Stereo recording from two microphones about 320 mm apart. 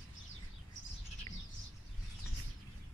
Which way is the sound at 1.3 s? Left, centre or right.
Left.